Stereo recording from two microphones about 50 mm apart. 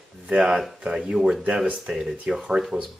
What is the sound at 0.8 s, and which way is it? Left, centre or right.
Speech, centre.